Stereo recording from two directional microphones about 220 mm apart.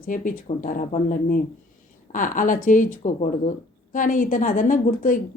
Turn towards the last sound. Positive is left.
turn(degrees=40)  # may be behind; listen again after turning